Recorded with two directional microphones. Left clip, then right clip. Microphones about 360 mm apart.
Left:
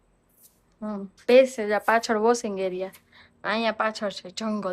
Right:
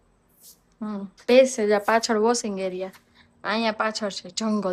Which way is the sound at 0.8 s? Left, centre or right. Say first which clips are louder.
Even; centre.